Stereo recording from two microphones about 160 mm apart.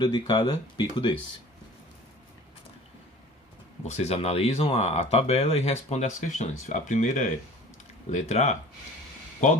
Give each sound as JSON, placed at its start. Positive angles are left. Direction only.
{"t": 0.0, "sound": "speech", "side_deg": 30}
{"t": 3.8, "sound": "speech", "side_deg": 45}